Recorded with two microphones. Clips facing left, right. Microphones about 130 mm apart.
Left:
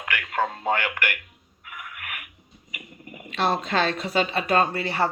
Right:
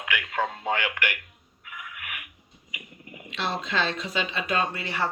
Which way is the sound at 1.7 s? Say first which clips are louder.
Left 2 dB; 50° left (ahead or behind).